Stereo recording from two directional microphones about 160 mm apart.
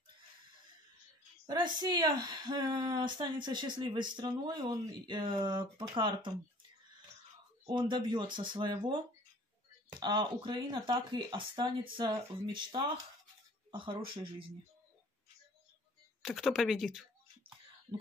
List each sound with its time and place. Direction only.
1.5 s speech: 25° right (ahead or behind)
7.6 s speech: 30° right (ahead or behind)
16.2 s speech: centre (ahead or behind)
17.9 s speech: 35° right (ahead or behind)